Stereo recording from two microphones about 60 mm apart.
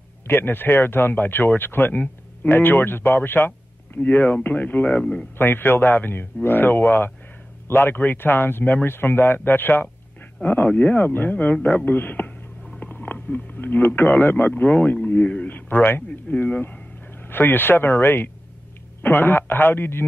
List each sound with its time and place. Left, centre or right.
0.3 s speech: left
3.2 s a sound: left
4.0 s speech: left
5.4 s a man's voice: left
17.3 s speech: left